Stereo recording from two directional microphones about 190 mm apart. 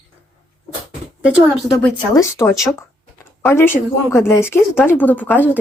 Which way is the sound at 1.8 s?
15° left (ahead or behind).